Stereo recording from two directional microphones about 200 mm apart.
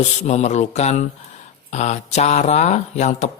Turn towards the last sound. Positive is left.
turn(degrees=35)  # may be behind; listen again after turning